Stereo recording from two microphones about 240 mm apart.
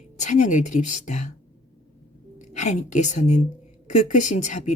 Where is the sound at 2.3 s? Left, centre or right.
Left.